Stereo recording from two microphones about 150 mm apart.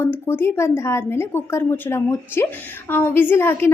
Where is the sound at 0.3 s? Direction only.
15° left (ahead or behind).